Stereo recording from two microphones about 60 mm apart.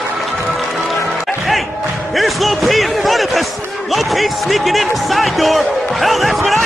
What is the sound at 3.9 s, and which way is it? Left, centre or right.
Speech, centre.